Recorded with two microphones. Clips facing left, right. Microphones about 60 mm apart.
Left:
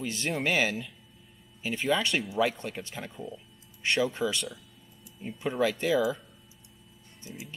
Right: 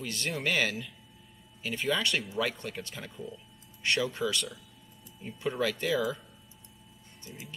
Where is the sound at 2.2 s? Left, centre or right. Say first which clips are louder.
Left 4 dB; centre.